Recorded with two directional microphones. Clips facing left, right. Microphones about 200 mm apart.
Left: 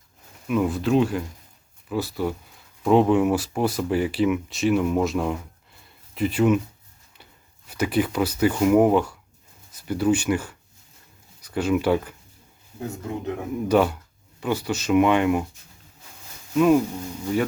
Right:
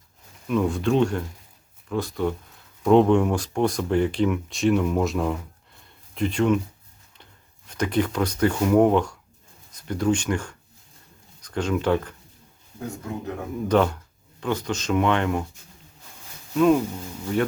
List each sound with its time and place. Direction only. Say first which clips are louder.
0.4 s speech: even; 5° left (ahead or behind)
7.7 s speech: left 1 dB; 5° left (ahead or behind)
13.7 s speech: left 1 dB; 10° left (ahead or behind)
16.6 s speech: left 1 dB; 5° left (ahead or behind)